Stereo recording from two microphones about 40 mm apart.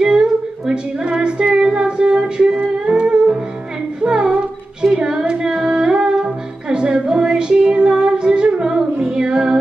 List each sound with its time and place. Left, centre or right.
0.0 s singing: centre
4.0 s music: right